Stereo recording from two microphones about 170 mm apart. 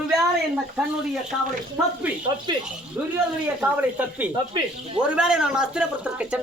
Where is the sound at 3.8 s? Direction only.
10° right (ahead or behind).